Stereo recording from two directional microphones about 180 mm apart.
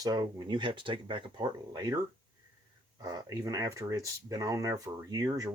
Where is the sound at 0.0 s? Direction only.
20° right (ahead or behind).